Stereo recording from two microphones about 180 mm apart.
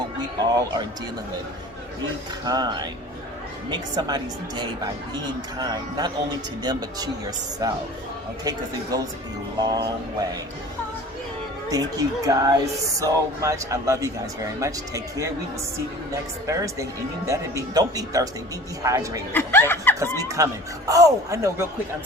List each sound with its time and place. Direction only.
0.3 s speech: 20° right (ahead or behind)
2.4 s speech: 20° right (ahead or behind)
8.9 s speech: 20° right (ahead or behind)
11.7 s speech: 20° right (ahead or behind)
16.5 s speech: 20° right (ahead or behind)
19.3 s speech: 10° left (ahead or behind)
20.2 s speech: 15° right (ahead or behind)